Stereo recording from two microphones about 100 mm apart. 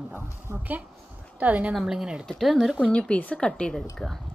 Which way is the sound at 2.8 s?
10° left (ahead or behind).